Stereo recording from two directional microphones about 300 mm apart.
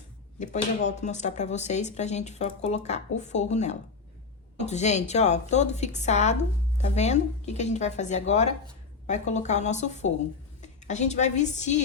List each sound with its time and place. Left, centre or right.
0.3 s a woman's voice: left